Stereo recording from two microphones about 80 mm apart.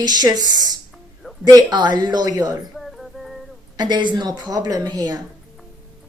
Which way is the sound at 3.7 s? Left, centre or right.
Right.